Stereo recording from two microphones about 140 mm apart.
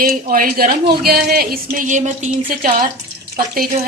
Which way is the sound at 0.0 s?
85° right.